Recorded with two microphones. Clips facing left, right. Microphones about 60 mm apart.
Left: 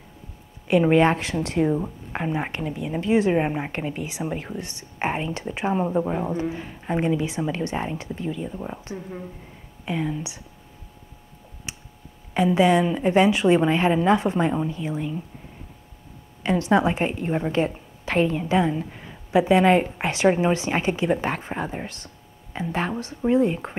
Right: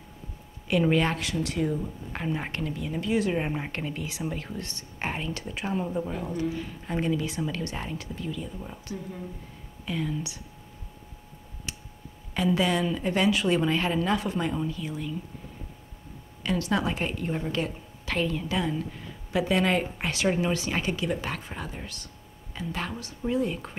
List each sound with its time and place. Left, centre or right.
0.7 s a woman's voice: left
11.7 s a sound: left
12.4 s a woman's voice: left
16.4 s a woman's voice: left